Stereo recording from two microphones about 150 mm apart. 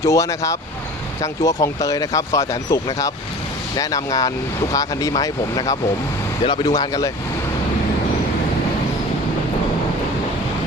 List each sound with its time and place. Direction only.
0.0 s speech: 20° left (ahead or behind)